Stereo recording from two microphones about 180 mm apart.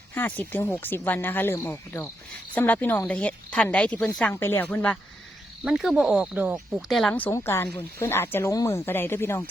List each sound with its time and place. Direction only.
0.1 s a woman's voice: 10° left (ahead or behind)
5.6 s speech: centre (ahead or behind)
7.1 s a woman's voice: 10° left (ahead or behind)